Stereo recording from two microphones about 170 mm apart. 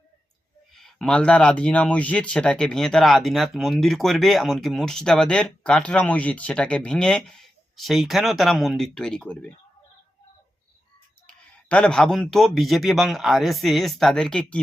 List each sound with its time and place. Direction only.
0.8 s speech: 5° left (ahead or behind)
11.3 s speech: 5° left (ahead or behind)